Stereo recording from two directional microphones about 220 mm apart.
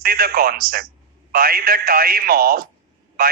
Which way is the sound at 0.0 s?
40° right (ahead or behind).